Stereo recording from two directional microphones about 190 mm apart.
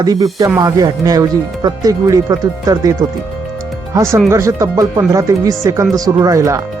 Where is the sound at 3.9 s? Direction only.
15° right (ahead or behind).